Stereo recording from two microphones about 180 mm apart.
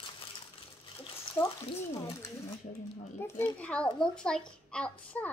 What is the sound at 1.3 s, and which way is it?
A child's voice, 15° left (ahead or behind).